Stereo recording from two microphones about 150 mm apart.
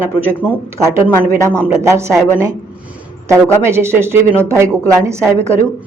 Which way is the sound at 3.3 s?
15° right (ahead or behind).